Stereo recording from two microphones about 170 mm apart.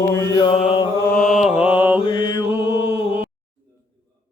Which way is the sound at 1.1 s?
Centre (ahead or behind).